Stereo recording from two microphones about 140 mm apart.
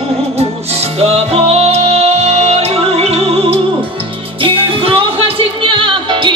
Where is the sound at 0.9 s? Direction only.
45° right (ahead or behind).